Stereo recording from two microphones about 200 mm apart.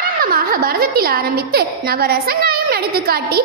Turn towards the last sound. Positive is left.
turn(degrees=-50)  # may be behind; listen again after turning